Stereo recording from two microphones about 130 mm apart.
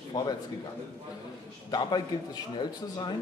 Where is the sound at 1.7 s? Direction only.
30° left (ahead or behind).